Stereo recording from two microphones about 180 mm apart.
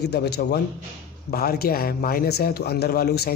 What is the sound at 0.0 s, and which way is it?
Speech, 65° left (ahead or behind).